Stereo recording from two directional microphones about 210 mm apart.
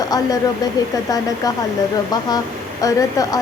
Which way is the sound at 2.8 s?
15° left (ahead or behind).